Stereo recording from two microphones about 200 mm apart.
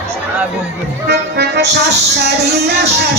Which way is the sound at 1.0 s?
55° right (ahead or behind).